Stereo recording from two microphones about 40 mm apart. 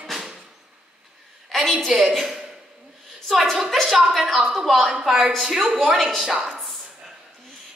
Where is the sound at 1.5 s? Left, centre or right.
Centre.